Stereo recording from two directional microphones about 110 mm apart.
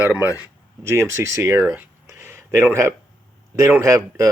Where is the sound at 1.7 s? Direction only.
25° right (ahead or behind).